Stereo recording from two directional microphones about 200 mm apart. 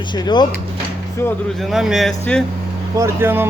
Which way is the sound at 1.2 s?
10° left (ahead or behind).